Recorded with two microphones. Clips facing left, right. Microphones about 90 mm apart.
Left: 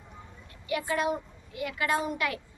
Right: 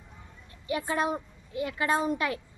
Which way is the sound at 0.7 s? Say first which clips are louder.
Even; 30° right (ahead or behind).